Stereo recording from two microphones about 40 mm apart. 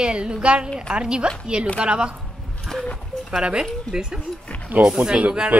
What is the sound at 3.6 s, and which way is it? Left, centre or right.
A woman's voice, centre.